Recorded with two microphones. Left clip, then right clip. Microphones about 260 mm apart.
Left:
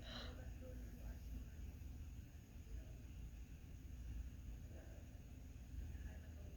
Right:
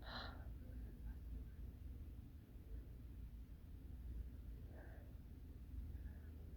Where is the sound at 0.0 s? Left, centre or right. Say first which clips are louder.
Right 2 dB; right.